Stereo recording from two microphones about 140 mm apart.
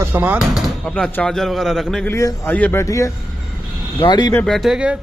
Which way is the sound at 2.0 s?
20° left (ahead or behind).